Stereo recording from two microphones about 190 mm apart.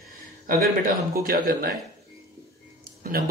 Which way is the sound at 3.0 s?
45° right (ahead or behind).